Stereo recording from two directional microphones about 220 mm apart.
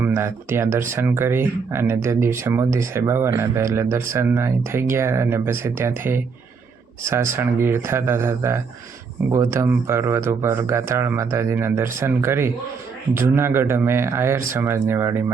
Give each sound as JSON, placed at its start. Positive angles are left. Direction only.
{"t": 0.0, "sound": "speech", "side_deg": -10}